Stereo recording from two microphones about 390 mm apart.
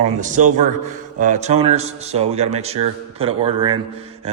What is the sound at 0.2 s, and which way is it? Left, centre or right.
A man's voice, centre.